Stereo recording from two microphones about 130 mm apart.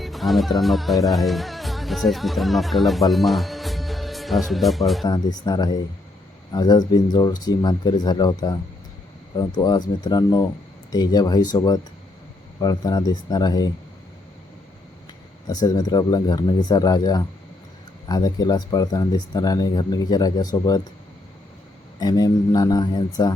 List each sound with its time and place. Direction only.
0.0 s music: centre (ahead or behind)
5.0 s speech: 30° left (ahead or behind)
15.4 s speech: 30° left (ahead or behind)
21.9 s speech: 30° left (ahead or behind)